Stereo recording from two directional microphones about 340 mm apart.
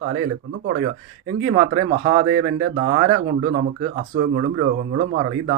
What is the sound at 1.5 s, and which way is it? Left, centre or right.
Speech, right.